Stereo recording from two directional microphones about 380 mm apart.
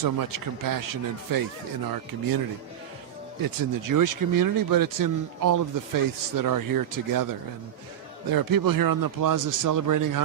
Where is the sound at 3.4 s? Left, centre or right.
Right.